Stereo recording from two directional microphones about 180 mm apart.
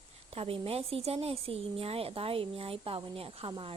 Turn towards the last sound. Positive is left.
turn(degrees=-30)  # may be behind; listen again after turning